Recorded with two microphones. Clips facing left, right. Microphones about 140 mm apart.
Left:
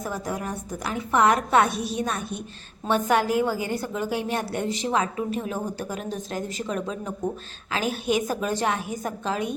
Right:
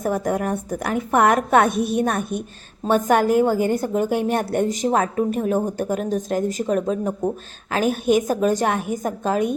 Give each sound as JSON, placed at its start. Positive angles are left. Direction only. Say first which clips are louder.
{"t": 0.0, "sound": "a woman's voice", "louder": "right 8 dB", "side_deg": -55}